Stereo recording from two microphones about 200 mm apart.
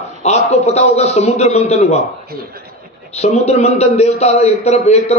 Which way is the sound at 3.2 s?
30° left (ahead or behind).